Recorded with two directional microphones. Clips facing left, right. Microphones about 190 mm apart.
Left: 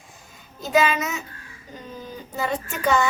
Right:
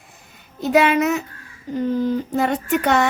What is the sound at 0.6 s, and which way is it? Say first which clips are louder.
Speech: right 5 dB; 60° right (ahead or behind).